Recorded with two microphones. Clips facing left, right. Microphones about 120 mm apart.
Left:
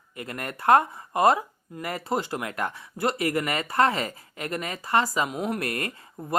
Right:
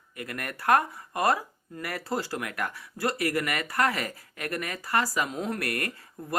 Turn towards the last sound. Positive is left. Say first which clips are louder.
# left 1 dB
turn(degrees=20)  # may be behind; listen again after turning